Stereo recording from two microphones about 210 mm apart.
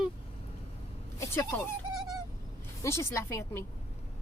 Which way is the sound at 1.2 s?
10° left (ahead or behind).